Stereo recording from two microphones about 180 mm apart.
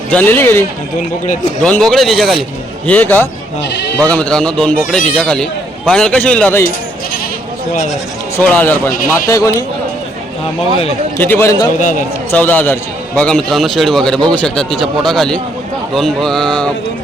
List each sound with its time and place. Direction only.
0.1 s speech: 10° left (ahead or behind)
1.3 s a man's voice: 40° left (ahead or behind)
1.6 s a man's voice: 5° left (ahead or behind)
3.6 s speech: 70° left (ahead or behind)
4.1 s a man's voice: 5° left (ahead or behind)
8.4 s speech: 10° left (ahead or behind)
11.2 s speech: 10° left (ahead or behind)
11.8 s a man's voice: 45° left (ahead or behind)
12.3 s a man's voice: 10° left (ahead or behind)